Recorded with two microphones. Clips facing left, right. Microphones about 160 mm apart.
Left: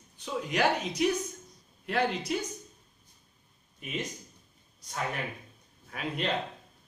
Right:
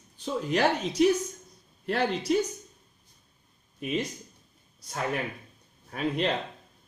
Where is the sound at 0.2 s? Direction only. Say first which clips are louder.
Right 3 dB; 35° right (ahead or behind).